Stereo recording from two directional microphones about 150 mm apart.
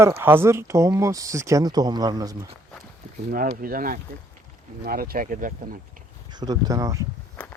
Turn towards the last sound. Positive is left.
turn(degrees=-20)  # may be behind; listen again after turning